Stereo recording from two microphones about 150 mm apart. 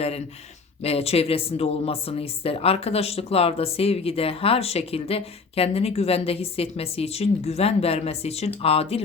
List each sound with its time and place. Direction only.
0.8 s speech: 40° left (ahead or behind)